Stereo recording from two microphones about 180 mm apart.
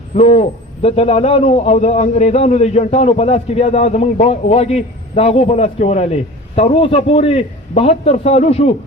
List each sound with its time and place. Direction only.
0.1 s a man's voice: 35° left (ahead or behind)